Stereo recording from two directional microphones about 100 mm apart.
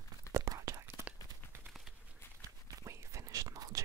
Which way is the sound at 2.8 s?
30° right (ahead or behind).